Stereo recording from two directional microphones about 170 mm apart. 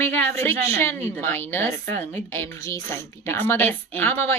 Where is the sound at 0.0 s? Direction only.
10° left (ahead or behind).